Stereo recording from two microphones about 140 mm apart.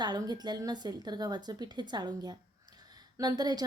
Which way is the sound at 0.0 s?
30° right (ahead or behind).